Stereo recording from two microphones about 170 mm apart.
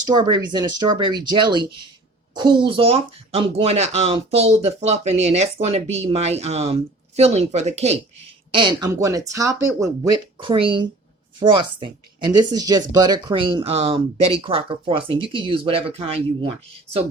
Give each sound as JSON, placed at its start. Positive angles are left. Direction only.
{"t": 0.1, "sound": "speech", "side_deg": -25}
{"t": 8.5, "sound": "speech", "side_deg": -30}